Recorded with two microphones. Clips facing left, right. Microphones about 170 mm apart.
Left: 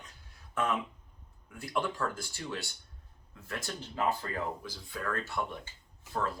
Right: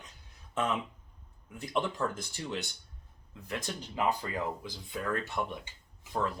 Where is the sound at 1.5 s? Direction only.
20° right (ahead or behind).